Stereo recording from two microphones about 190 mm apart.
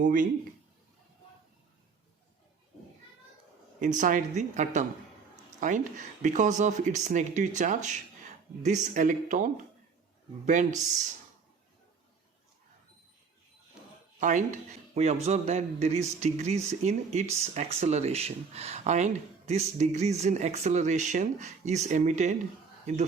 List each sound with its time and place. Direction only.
0.0 s speech: 45° right (ahead or behind)
3.8 s speech: 40° right (ahead or behind)
14.2 s speech: 40° right (ahead or behind)